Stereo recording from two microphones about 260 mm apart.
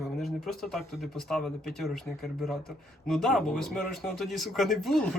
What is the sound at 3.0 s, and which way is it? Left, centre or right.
Speech, centre.